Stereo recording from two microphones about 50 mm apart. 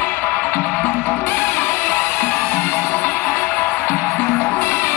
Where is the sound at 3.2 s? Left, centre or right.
Left.